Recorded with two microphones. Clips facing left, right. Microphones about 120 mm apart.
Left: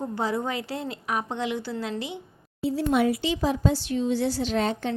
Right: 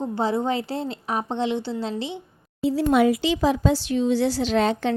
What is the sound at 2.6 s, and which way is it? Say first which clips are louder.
Speech: right 4 dB; 90° right.